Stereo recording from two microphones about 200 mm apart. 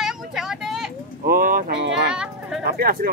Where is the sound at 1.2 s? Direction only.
45° right (ahead or behind).